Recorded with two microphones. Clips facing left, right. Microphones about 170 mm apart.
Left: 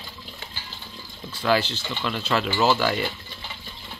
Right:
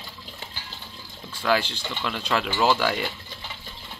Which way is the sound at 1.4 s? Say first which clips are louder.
Left 1 dB; 10° right (ahead or behind).